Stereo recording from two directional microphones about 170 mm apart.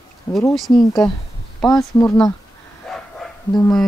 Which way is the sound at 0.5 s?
Centre (ahead or behind).